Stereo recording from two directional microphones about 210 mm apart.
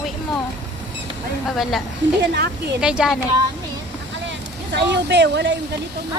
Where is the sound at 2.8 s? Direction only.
5° right (ahead or behind).